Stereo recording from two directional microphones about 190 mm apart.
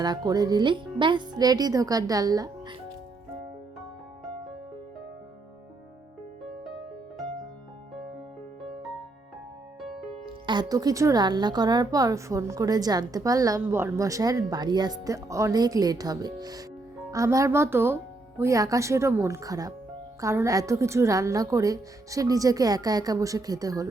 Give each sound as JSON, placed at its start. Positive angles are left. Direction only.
{"t": 0.0, "sound": "a woman's voice", "side_deg": -20}
{"t": 9.8, "sound": "music", "side_deg": 0}
{"t": 10.4, "sound": "a woman's voice", "side_deg": -25}